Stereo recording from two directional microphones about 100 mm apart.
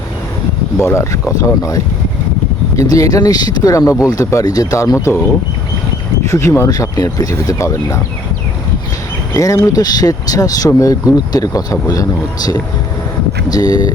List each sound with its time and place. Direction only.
0.8 s speech: 25° left (ahead or behind)
6.2 s speech: 30° left (ahead or behind)
9.3 s speech: 35° left (ahead or behind)
13.5 s speech: 40° left (ahead or behind)